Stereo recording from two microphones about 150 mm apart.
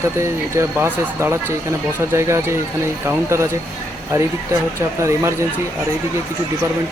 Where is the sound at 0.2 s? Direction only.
20° right (ahead or behind).